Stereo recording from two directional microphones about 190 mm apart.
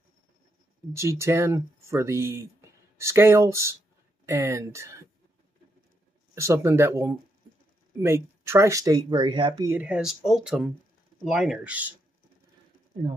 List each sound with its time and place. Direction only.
0.9 s speech: 15° right (ahead or behind)
6.3 s speech: 15° right (ahead or behind)
9.7 s speech: 5° right (ahead or behind)